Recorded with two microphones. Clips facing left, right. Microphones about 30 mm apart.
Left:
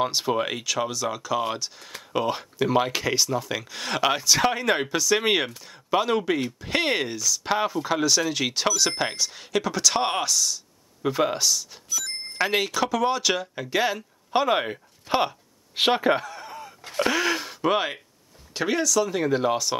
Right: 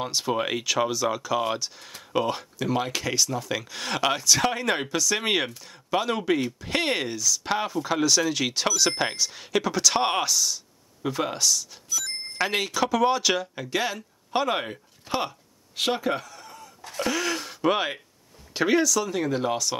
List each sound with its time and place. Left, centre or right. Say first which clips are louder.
0.0 s speech: left 4 dB; centre
0.3 s speech: even; centre
11.0 s speech: left 3 dB; centre
15.0 s a sound: left 5 dB; left; by 18.0 s centre
18.5 s speech: right 2 dB; centre